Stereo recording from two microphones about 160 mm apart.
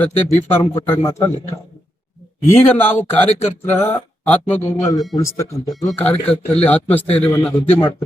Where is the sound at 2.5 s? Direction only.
15° left (ahead or behind).